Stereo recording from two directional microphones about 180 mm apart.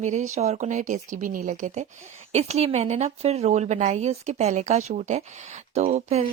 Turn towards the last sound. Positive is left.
turn(degrees=-40)  # may be behind; listen again after turning